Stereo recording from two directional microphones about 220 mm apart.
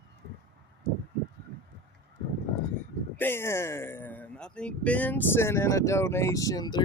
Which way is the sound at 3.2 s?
10° left (ahead or behind).